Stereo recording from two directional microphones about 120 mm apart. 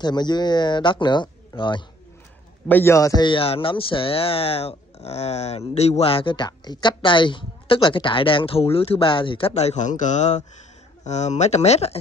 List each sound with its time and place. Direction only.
0.0 s speech: 35° left (ahead or behind)
2.7 s speech: 20° left (ahead or behind); by 9.5 s 45° left (ahead or behind)
9.5 s speech: 65° left (ahead or behind)